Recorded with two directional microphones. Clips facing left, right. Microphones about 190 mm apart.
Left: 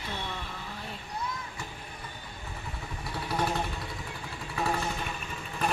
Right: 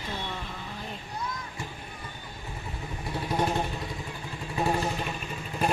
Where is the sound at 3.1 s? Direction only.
20° right (ahead or behind).